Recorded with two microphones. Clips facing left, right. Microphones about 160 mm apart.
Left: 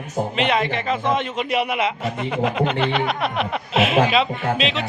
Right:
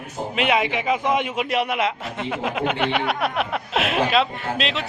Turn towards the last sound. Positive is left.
turn(degrees=0)  # may be behind; listen again after turning